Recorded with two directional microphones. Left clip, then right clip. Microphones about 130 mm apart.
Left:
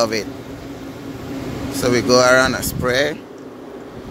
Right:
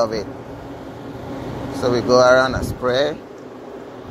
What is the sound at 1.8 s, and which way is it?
Speech, 45° left (ahead or behind).